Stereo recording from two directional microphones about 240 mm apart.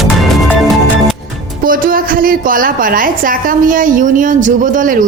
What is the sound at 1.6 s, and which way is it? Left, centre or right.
A woman's voice, right.